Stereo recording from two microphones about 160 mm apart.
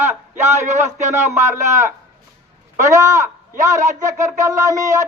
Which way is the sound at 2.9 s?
20° right (ahead or behind).